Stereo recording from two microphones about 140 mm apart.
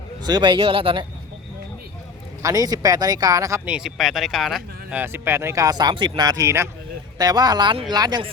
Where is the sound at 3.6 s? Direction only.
5° right (ahead or behind).